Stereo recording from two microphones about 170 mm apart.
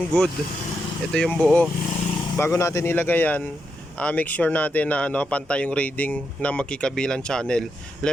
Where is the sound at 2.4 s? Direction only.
15° left (ahead or behind).